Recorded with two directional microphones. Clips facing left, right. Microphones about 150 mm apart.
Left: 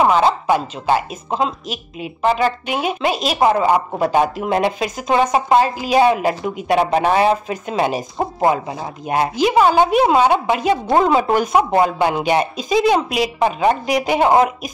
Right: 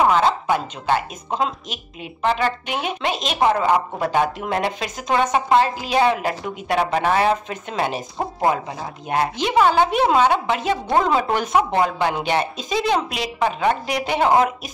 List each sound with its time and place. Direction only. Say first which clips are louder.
0.1 s speech: left 3 dB; 10° left (ahead or behind)